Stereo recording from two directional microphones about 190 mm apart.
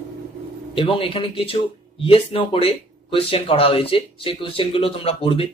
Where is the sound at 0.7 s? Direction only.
25° left (ahead or behind).